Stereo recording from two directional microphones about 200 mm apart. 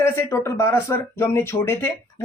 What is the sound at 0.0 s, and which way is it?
Speech, 15° left (ahead or behind).